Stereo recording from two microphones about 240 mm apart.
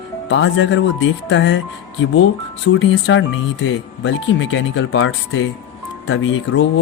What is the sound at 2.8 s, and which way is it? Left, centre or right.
Speech, left.